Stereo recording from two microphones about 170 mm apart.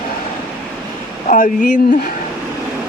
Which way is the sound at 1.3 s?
50° left (ahead or behind).